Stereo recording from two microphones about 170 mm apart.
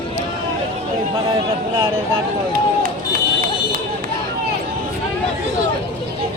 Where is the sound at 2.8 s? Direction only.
55° right (ahead or behind).